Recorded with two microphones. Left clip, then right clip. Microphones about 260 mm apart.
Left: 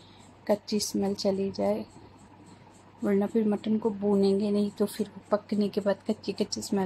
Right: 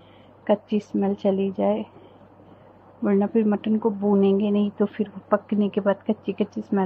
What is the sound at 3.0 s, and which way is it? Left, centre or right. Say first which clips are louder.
Speech: right 5 dB; centre.